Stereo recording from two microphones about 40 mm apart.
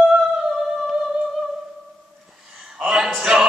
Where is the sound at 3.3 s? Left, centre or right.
Centre.